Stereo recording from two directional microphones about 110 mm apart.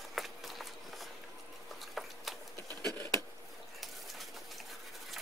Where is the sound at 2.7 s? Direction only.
35° right (ahead or behind).